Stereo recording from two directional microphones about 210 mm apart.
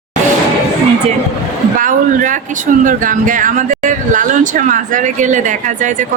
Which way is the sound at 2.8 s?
40° right (ahead or behind).